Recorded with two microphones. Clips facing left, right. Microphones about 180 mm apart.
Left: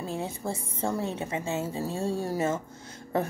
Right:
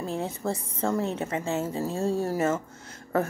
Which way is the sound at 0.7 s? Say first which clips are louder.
Right 2 dB; 10° left (ahead or behind).